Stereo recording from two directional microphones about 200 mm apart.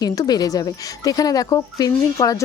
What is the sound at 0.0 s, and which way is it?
Speech, 20° left (ahead or behind).